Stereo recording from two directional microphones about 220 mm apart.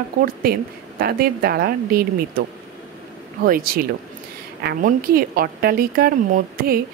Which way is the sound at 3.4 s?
40° right (ahead or behind).